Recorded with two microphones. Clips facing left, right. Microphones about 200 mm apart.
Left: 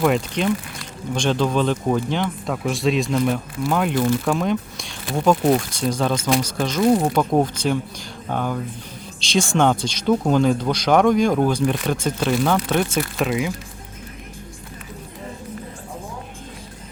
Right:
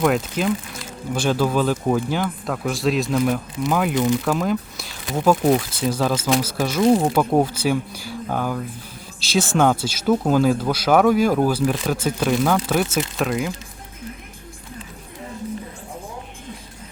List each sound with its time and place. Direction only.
0.0 s speech: centre (ahead or behind)